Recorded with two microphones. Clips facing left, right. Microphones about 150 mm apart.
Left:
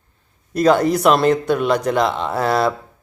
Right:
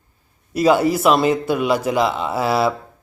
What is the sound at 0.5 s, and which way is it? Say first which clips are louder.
Speech: left 1 dB; 5° right (ahead or behind).